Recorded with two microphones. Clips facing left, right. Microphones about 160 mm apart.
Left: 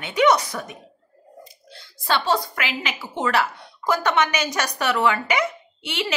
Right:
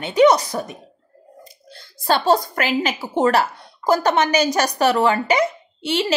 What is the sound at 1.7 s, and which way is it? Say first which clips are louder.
A woman's voice: right 4 dB; 40° right (ahead or behind).